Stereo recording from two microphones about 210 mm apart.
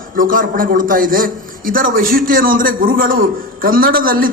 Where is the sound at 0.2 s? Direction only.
40° right (ahead or behind).